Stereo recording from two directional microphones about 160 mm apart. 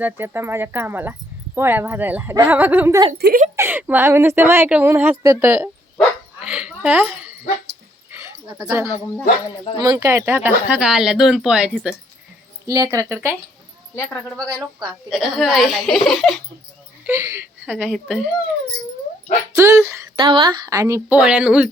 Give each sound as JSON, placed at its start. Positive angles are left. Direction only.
{"t": 0.0, "sound": "a woman's voice", "side_deg": -15}
{"t": 3.2, "sound": "speech", "side_deg": -90}
{"t": 3.5, "sound": "a woman's voice", "side_deg": -15}
{"t": 6.0, "sound": "dog", "side_deg": -5}
{"t": 9.8, "sound": "a woman's voice", "side_deg": -20}
{"t": 12.6, "sound": "speech", "side_deg": -20}
{"t": 13.9, "sound": "speech", "side_deg": 15}
{"t": 14.3, "sound": "speech", "side_deg": -25}
{"t": 15.1, "sound": "speech", "side_deg": 0}
{"t": 17.1, "sound": "a woman's voice", "side_deg": -15}
{"t": 17.8, "sound": "speech", "side_deg": 0}
{"t": 19.5, "sound": "a woman's voice", "side_deg": -15}
{"t": 20.1, "sound": "speech", "side_deg": -30}
{"t": 21.2, "sound": "a woman's voice", "side_deg": -5}